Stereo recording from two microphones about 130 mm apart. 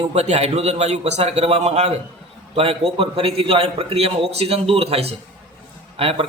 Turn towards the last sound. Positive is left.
turn(degrees=-50)  # may be behind; listen again after turning